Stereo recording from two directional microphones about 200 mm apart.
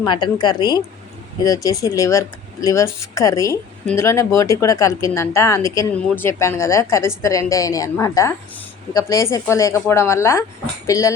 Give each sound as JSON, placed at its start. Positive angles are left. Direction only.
{"t": 0.0, "sound": "a woman's voice", "side_deg": 25}